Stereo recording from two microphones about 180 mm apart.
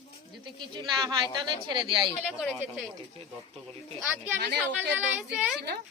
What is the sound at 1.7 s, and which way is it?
Speech, 25° right (ahead or behind).